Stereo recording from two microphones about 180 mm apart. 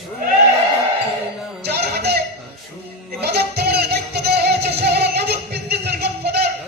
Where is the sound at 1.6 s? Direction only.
65° right (ahead or behind).